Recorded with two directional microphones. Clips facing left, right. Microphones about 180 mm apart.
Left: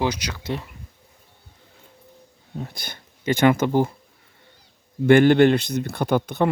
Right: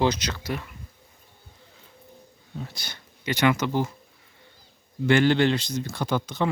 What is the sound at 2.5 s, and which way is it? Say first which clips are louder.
Speech: left 4 dB; 50° left (ahead or behind).